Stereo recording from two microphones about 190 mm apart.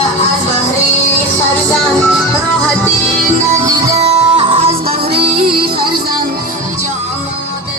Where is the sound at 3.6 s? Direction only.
20° right (ahead or behind).